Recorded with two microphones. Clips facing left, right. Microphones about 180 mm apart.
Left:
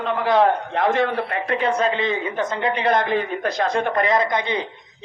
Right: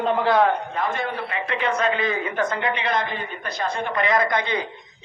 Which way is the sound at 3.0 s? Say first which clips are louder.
Left 9 dB; 80° left.